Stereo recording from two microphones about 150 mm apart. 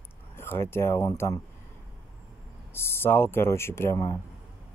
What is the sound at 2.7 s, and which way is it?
Speech, 15° left (ahead or behind).